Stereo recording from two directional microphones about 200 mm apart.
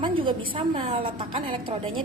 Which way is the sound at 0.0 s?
25° right (ahead or behind).